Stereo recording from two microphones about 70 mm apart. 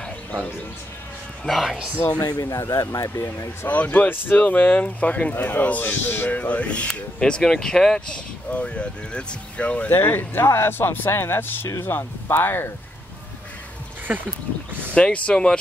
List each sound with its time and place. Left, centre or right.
1.4 s speech: centre
2.1 s speech: left
2.4 s speech: left
3.6 s speech: left
5.3 s speech: left
9.9 s speech: left
14.1 s speech: centre
15.0 s speech: centre